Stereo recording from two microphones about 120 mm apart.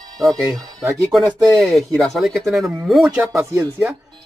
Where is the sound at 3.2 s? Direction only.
20° right (ahead or behind).